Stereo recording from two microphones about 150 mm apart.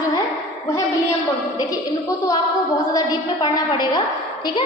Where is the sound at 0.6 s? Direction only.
20° left (ahead or behind).